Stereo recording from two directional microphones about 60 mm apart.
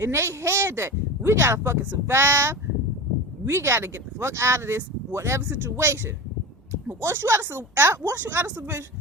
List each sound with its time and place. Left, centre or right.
0.0 s speech: right
7.0 s a woman's voice: right